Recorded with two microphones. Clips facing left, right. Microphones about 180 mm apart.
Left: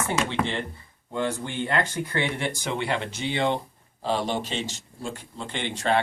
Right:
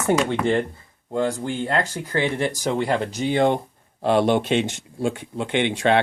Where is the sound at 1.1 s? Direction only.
40° right (ahead or behind).